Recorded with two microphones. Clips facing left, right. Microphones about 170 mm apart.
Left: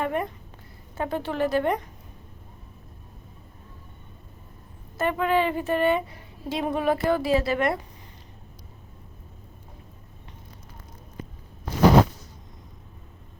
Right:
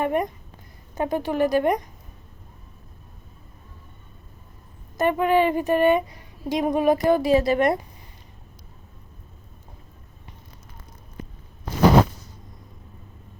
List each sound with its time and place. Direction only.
0.0 s a woman's voice: 15° right (ahead or behind)
4.9 s a woman's voice: 15° right (ahead or behind)
7.5 s a woman's voice: 40° right (ahead or behind)